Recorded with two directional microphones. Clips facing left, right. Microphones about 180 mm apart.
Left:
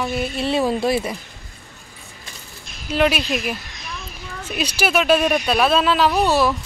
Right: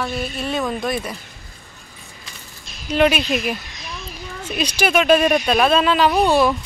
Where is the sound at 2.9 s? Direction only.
Centre (ahead or behind).